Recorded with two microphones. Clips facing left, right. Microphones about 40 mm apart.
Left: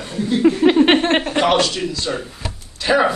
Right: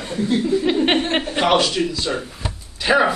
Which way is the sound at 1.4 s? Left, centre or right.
Centre.